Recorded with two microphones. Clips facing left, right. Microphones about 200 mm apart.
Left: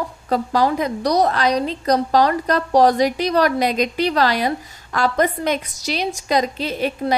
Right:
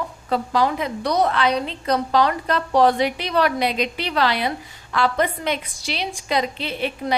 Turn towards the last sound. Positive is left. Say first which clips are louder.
# left 4 dB
turn(degrees=40)  # may be behind; listen again after turning